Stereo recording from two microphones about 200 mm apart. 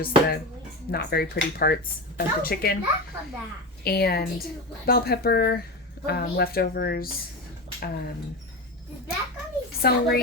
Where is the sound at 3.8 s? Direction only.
50° left (ahead or behind).